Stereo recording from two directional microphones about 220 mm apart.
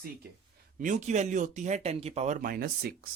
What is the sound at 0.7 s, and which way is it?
Speech, 35° right (ahead or behind).